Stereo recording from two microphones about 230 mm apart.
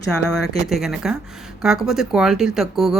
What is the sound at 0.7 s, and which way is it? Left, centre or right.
Speech, centre.